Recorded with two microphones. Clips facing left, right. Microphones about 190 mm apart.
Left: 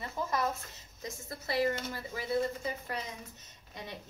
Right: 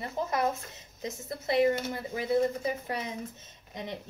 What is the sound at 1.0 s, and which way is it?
A woman's voice, 20° right (ahead or behind).